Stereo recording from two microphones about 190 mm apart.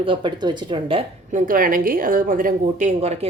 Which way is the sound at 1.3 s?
45° right (ahead or behind).